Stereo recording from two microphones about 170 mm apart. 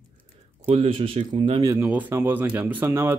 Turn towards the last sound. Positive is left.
turn(degrees=-10)  # may be behind; listen again after turning